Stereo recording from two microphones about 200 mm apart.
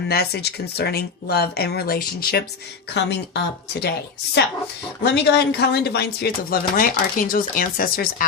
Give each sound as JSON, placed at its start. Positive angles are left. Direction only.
{"t": 0.1, "sound": "speech", "side_deg": 50}
{"t": 5.0, "sound": "speech", "side_deg": 55}